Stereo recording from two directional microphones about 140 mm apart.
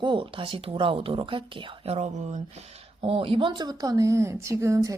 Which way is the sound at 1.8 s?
50° right (ahead or behind).